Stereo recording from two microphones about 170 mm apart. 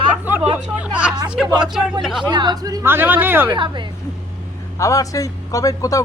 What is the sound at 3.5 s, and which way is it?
Speech, 30° right (ahead or behind).